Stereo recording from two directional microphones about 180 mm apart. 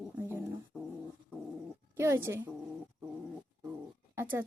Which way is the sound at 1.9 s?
15° right (ahead or behind).